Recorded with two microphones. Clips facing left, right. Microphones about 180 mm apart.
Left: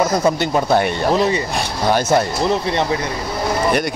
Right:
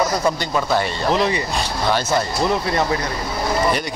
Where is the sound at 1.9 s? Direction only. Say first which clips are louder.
Left 5 dB; 50° left (ahead or behind).